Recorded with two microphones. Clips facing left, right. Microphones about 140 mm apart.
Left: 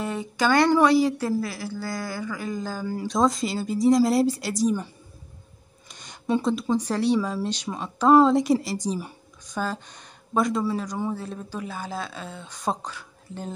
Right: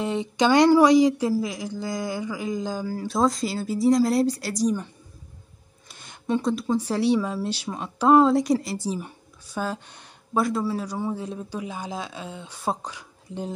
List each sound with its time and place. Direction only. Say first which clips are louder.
0.0 s speech: right 3 dB; 20° right (ahead or behind)
2.9 s speech: left 1 dB; 5° right (ahead or behind)
5.9 s a sound: left 1 dB; 5° right (ahead or behind)
6.2 s speech: even; 5° left (ahead or behind)
6.8 s speech: right 1 dB; 10° right (ahead or behind)